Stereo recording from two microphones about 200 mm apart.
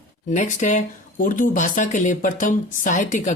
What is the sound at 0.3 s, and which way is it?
Speech, 40° left (ahead or behind).